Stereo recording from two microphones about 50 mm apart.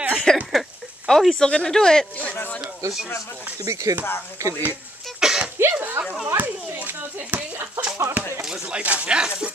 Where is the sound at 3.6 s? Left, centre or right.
Right.